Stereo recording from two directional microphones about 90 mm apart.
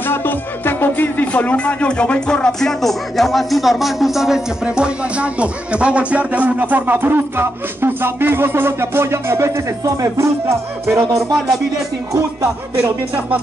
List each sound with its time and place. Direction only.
0.0 s speech: 25° left (ahead or behind); by 9.5 s 30° right (ahead or behind)
10.9 s music: 30° right (ahead or behind)